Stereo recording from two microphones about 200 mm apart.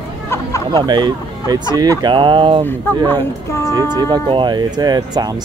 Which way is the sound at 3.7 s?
20° right (ahead or behind).